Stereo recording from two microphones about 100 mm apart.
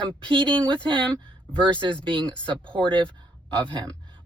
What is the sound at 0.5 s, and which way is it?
Speech, 10° left (ahead or behind).